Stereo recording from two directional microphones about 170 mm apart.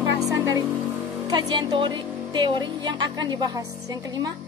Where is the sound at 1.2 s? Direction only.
25° right (ahead or behind).